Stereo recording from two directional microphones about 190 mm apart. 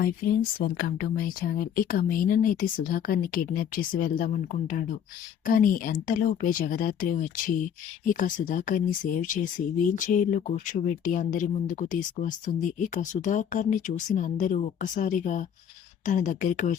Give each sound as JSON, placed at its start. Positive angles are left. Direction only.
{"t": 0.6, "sound": "speech", "side_deg": 50}